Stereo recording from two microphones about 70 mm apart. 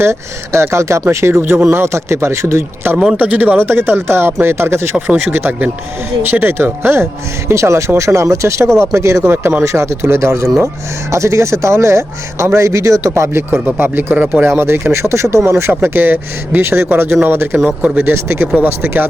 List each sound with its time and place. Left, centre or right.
0.0 s speech: right
3.2 s speech: right
14.4 s speech: right